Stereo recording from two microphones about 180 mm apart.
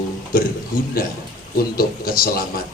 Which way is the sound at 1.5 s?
55° left (ahead or behind).